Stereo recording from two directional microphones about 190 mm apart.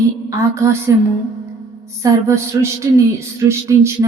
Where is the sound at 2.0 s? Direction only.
15° right (ahead or behind).